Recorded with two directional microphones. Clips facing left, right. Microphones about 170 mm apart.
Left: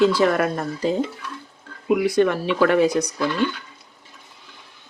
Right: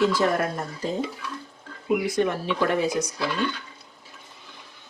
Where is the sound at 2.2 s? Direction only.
85° left.